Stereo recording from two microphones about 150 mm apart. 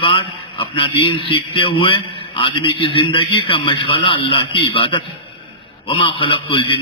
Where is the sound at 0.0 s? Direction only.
35° left (ahead or behind).